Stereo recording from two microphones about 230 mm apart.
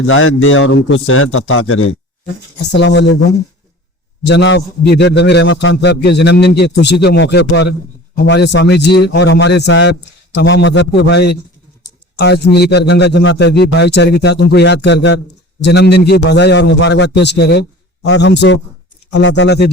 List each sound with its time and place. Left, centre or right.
0.1 s a man's voice: left
2.7 s a man's voice: left
4.3 s a man's voice: left